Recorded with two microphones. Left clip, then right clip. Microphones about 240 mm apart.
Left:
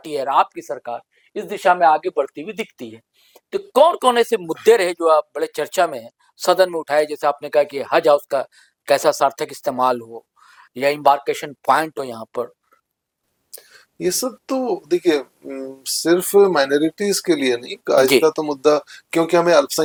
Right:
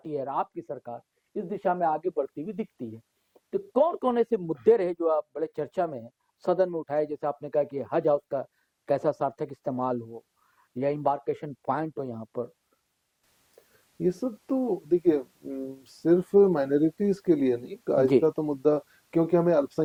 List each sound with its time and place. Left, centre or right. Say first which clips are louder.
0.0 s speech: left 12 dB; centre
10.0 s speech: left 7 dB; left
10.4 s speech: left 10 dB; centre
14.0 s speech: left 7 dB; centre
14.5 s speech: left 7 dB; left
14.8 s speech: left 5 dB; centre